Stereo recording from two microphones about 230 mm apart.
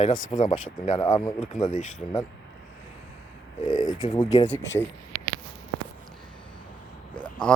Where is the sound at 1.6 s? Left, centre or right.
Left.